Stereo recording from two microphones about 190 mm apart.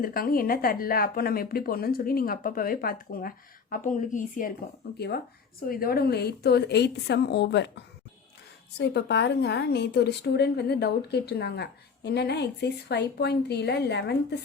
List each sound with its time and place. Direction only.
0.0 s a woman's voice: 50° left (ahead or behind)
4.9 s a woman's voice: 60° left (ahead or behind)